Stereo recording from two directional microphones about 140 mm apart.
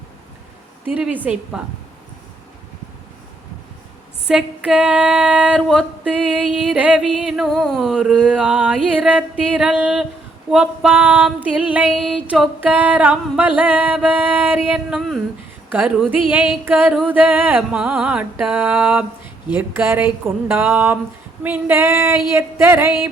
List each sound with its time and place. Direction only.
0.9 s female singing: 10° right (ahead or behind)
4.3 s female singing: 5° right (ahead or behind)
15.7 s female singing: 10° right (ahead or behind)